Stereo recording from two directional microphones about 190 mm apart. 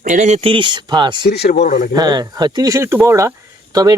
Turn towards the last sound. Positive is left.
turn(degrees=-20)  # may be behind; listen again after turning